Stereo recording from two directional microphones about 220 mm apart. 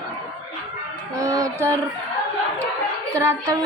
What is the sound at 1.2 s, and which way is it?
Speech, 15° right (ahead or behind).